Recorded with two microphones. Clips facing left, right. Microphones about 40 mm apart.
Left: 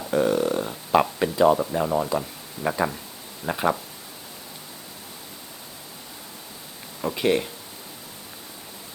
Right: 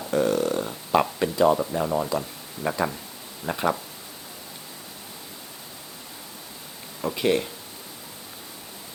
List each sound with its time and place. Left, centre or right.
0.1 s speech: centre
7.0 s speech: centre